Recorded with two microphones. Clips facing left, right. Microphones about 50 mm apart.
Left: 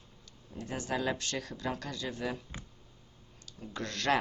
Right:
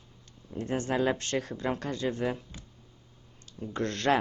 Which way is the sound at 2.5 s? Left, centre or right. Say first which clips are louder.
Left 2 dB; left.